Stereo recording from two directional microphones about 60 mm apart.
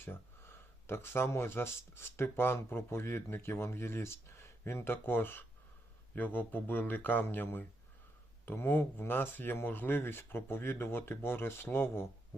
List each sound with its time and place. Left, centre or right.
0.0 s speech: left